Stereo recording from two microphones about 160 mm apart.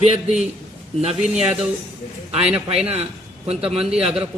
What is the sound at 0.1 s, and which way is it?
Speech, 45° right (ahead or behind).